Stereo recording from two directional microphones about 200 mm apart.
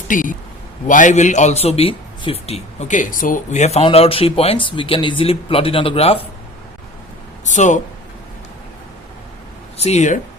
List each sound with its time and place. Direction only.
0.1 s a man's voice: 40° left (ahead or behind)
7.4 s speech: 40° left (ahead or behind)
9.7 s speech: 35° left (ahead or behind)